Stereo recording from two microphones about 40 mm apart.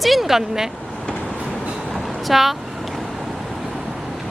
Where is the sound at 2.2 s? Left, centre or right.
Centre.